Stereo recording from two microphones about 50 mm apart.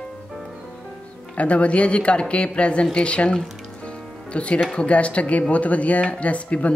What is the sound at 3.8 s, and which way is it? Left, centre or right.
Music, left.